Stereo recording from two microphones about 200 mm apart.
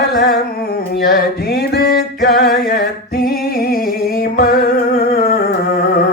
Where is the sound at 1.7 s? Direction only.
50° left (ahead or behind).